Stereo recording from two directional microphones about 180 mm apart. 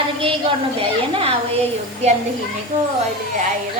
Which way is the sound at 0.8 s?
30° right (ahead or behind).